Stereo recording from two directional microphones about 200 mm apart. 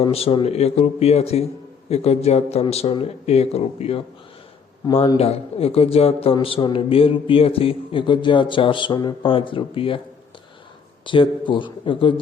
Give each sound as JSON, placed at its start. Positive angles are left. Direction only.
{"t": 0.0, "sound": "a man's voice", "side_deg": 30}
{"t": 11.0, "sound": "a man's voice", "side_deg": 25}